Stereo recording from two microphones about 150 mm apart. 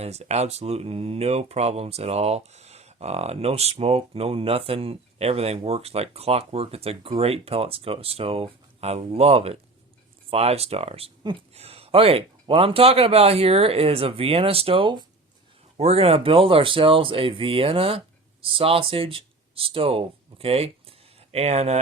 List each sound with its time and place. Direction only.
0.0 s speech: 45° right (ahead or behind)
11.2 s speech: 30° right (ahead or behind)
11.5 s speech: 40° right (ahead or behind)